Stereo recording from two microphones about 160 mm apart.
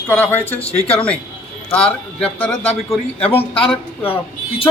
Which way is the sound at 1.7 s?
5° left (ahead or behind).